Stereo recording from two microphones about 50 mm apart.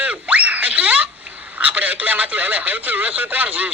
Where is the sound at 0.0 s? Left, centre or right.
Right.